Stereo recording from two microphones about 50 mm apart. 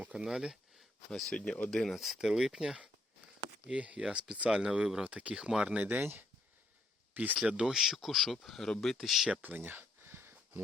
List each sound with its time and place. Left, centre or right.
0.1 s speech: centre
1.3 s speech: left
1.8 s speech: centre
2.1 s speech: centre
3.7 s speech: right
5.3 s speech: centre
5.8 s speech: right
7.4 s speech: centre
9.7 s a sound: right